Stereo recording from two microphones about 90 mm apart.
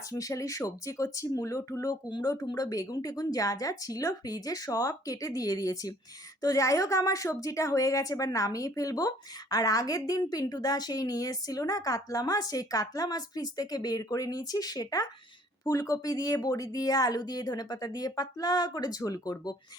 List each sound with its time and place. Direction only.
0.1 s a woman's voice: 40° left (ahead or behind)